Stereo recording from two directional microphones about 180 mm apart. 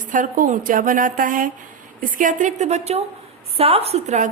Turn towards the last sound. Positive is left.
turn(degrees=-40)  # may be behind; listen again after turning